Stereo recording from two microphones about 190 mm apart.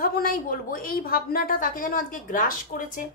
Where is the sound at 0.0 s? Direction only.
50° left (ahead or behind).